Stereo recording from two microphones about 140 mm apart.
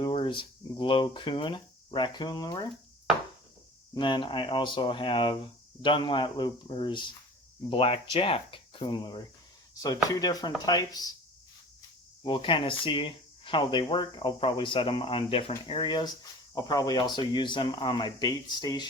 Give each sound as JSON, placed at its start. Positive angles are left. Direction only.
{"t": 0.0, "sound": "speech", "side_deg": 35}
{"t": 3.9, "sound": "speech", "side_deg": 35}
{"t": 12.2, "sound": "speech", "side_deg": 40}